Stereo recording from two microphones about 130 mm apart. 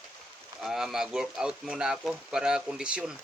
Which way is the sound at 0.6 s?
5° right (ahead or behind).